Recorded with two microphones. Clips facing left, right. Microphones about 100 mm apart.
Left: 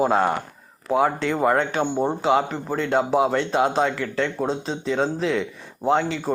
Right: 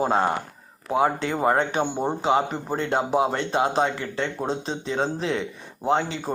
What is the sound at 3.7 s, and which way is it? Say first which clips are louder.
Speech: left 2 dB; 30° right (ahead or behind).